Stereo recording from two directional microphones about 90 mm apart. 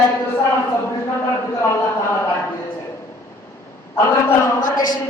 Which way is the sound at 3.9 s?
30° left (ahead or behind).